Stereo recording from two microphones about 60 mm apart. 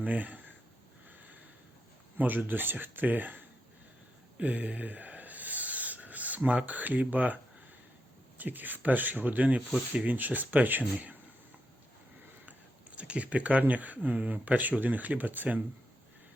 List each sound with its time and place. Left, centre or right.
0.0 s speech: right
2.1 s speech: right
4.4 s rub: right
8.4 s speech: right
13.0 s speech: right